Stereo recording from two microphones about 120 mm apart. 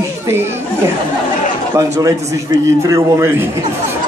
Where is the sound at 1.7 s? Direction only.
30° right (ahead or behind).